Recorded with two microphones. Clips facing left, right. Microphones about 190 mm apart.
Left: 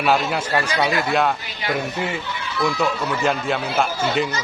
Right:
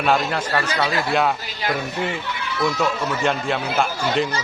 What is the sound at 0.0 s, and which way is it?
Speech, 5° left (ahead or behind).